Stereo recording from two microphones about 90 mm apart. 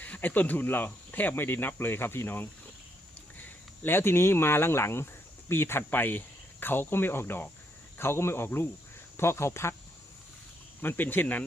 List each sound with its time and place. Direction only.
0.0 s speech: 15° left (ahead or behind)
3.8 s speech: 25° left (ahead or behind)
10.8 s speech: 20° left (ahead or behind)